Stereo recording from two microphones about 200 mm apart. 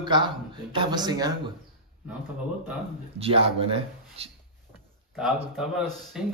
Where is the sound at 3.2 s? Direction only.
30° right (ahead or behind).